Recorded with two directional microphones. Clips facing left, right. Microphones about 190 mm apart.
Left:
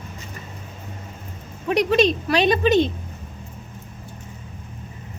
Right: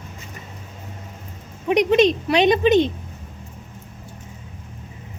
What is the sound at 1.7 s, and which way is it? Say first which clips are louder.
Speech: right 2 dB; 15° right (ahead or behind).